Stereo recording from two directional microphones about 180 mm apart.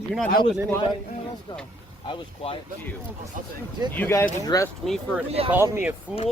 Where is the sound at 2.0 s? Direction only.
30° left (ahead or behind).